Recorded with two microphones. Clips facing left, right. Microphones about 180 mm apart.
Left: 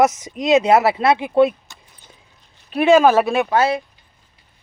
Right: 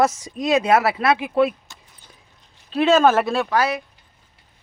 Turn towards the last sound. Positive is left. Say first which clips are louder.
# left 3 dB
turn(degrees=25)  # may be behind; listen again after turning